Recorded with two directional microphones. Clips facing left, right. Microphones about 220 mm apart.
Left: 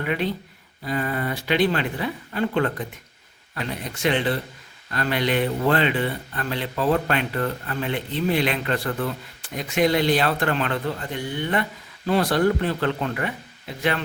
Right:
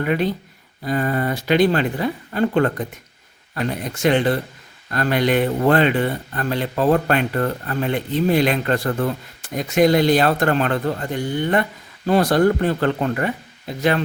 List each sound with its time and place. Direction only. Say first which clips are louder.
0.0 s speech: right 5 dB; 45° right (ahead or behind)